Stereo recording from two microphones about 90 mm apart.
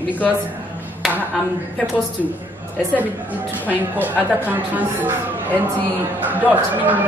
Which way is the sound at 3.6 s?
20° right (ahead or behind).